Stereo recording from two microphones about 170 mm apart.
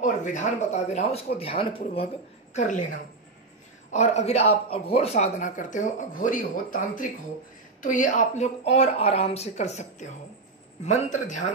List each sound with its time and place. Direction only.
0.0 s speech: 45° left (ahead or behind)
2.5 s a woman's voice: 45° left (ahead or behind)
3.9 s a man's voice: 40° left (ahead or behind)